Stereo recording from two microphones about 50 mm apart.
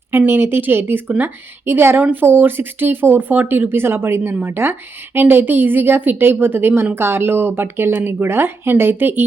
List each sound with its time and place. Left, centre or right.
0.3 s speech: right